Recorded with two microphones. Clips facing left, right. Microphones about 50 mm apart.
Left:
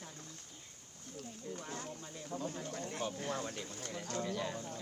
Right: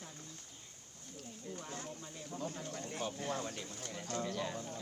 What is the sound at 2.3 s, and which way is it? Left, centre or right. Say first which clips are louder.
Speech: left 2 dB; left.